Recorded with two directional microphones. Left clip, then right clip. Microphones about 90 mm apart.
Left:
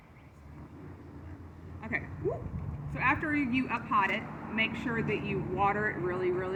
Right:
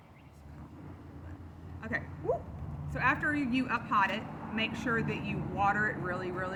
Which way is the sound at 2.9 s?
45° right (ahead or behind).